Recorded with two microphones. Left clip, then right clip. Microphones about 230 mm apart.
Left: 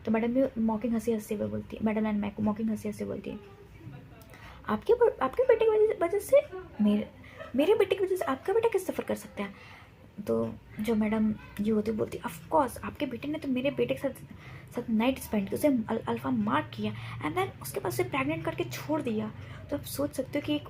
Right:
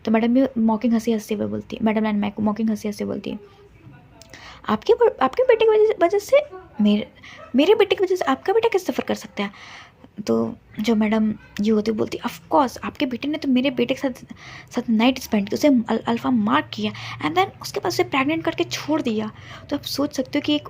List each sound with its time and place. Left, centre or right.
0.0 s a woman's voice: right
4.6 s a woman's voice: right
7.5 s a woman's voice: right